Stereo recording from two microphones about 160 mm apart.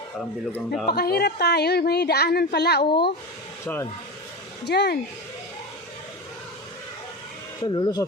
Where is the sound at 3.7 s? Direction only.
10° left (ahead or behind).